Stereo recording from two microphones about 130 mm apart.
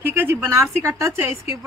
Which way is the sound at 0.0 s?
15° right (ahead or behind).